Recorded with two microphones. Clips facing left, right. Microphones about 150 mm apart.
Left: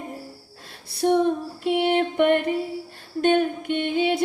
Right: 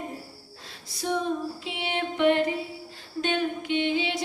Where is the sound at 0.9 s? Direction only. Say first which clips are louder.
Left 8 dB; 60° left (ahead or behind).